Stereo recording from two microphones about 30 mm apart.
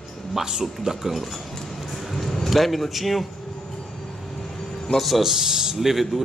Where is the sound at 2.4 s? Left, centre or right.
Centre.